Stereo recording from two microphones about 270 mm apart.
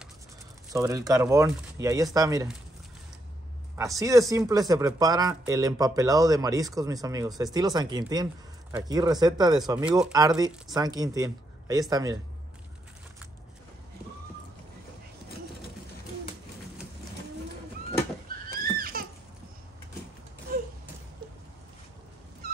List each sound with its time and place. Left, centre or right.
0.7 s speech: centre
3.7 s speech: centre
18.5 s a sound: right